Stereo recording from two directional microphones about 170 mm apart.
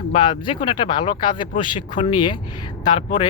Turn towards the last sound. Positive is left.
turn(degrees=25)  # may be behind; listen again after turning